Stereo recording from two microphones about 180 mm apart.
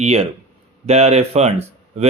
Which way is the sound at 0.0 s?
35° right (ahead or behind).